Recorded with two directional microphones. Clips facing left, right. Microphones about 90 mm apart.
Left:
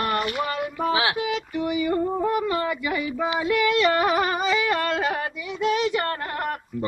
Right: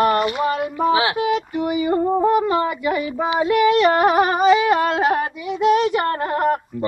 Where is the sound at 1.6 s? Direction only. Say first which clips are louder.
Right 3 dB; 35° right (ahead or behind).